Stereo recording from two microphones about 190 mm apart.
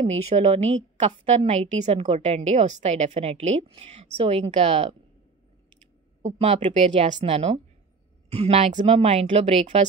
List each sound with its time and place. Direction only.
0.0 s a woman's voice: 35° right (ahead or behind)
6.2 s a woman's voice: 30° right (ahead or behind)